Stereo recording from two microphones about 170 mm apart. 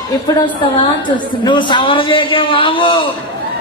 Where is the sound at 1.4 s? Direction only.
30° left (ahead or behind).